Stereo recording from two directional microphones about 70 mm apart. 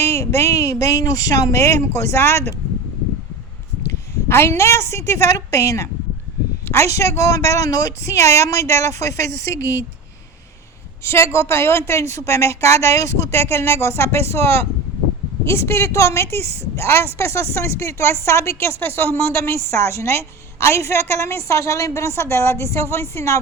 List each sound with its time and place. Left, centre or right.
0.0 s speech: left
4.3 s speech: left
11.0 s a woman's voice: left